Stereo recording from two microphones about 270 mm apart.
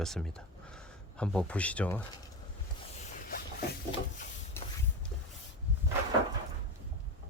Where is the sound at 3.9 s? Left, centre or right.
Left.